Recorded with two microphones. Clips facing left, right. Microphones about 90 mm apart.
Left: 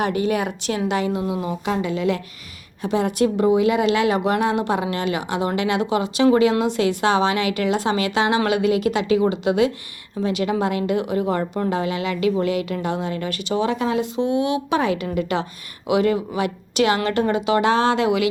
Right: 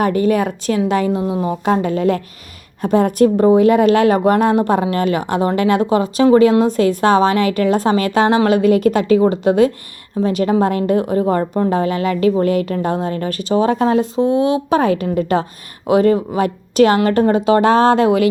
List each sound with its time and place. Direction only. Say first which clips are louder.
0.0 s a woman's voice: right 6 dB; 45° right (ahead or behind)
1.6 s a woman's voice: right 6 dB; 45° right (ahead or behind)